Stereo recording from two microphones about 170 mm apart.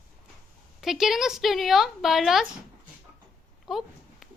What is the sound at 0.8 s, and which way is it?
A woman's voice, centre (ahead or behind).